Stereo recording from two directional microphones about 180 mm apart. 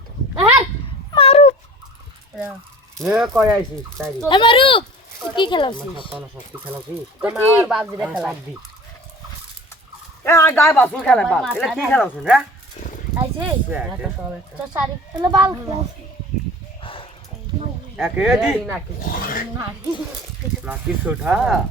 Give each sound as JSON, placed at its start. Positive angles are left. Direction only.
{"t": 1.1, "sound": "dog", "side_deg": 35}
{"t": 3.0, "sound": "speech", "side_deg": -5}
{"t": 4.3, "sound": "speech", "side_deg": 25}
{"t": 6.1, "sound": "speech", "side_deg": -10}
{"t": 10.2, "sound": "speech", "side_deg": 15}
{"t": 12.8, "sound": "speech", "side_deg": 40}
{"t": 13.1, "sound": "speech", "side_deg": -15}
{"t": 15.1, "sound": "speech", "side_deg": -25}
{"t": 16.8, "sound": "a sound", "side_deg": 30}
{"t": 17.9, "sound": "speech", "side_deg": -10}
{"t": 19.0, "sound": "a sound", "side_deg": 50}
{"t": 20.7, "sound": "speech", "side_deg": -5}